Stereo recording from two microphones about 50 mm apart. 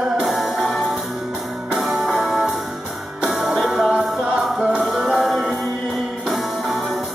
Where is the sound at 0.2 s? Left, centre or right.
Centre.